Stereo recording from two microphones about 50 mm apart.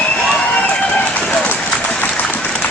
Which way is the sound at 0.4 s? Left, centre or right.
Left.